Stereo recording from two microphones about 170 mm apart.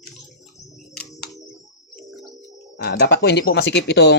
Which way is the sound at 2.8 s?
70° left (ahead or behind).